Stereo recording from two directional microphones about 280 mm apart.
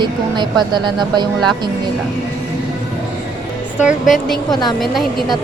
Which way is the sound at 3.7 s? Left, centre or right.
Centre.